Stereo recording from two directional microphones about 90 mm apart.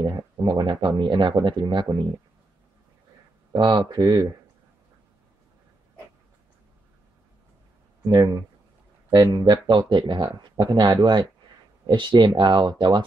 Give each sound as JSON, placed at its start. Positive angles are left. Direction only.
{"t": 0.0, "sound": "speech", "side_deg": -55}
{"t": 3.5, "sound": "speech", "side_deg": -60}
{"t": 8.0, "sound": "speech", "side_deg": -50}